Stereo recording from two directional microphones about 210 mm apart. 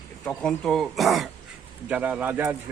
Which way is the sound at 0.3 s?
5° left (ahead or behind).